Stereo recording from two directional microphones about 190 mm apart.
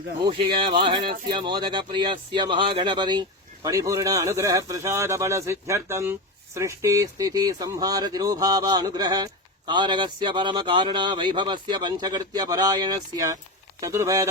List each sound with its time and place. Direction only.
0.3 s speech: 25° right (ahead or behind)